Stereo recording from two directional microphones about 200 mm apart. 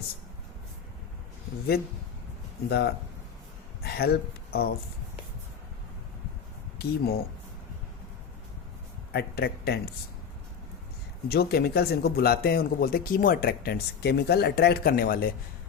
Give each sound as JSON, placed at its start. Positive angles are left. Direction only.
{"t": 2.6, "sound": "a man's voice", "side_deg": 50}
{"t": 6.7, "sound": "speech", "side_deg": 50}
{"t": 9.1, "sound": "a man's voice", "side_deg": 55}
{"t": 11.3, "sound": "a man's voice", "side_deg": 50}